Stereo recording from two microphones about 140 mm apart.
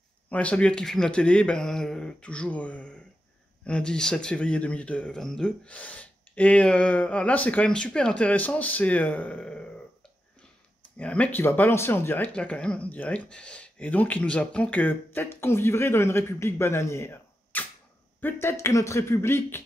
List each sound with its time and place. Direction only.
0.3 s speech: 10° left (ahead or behind)
11.0 s speech: 10° left (ahead or behind)